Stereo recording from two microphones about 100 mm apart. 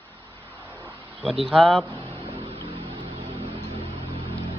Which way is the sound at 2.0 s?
70° right (ahead or behind).